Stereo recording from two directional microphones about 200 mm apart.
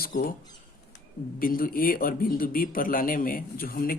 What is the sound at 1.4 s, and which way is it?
A man's voice, 45° left (ahead or behind).